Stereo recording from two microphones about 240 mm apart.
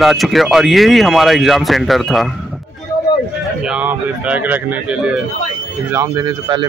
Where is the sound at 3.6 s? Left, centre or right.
Centre.